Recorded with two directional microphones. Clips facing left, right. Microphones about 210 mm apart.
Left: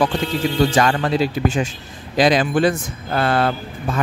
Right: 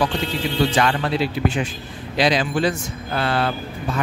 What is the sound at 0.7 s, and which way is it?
Speech, 45° left (ahead or behind).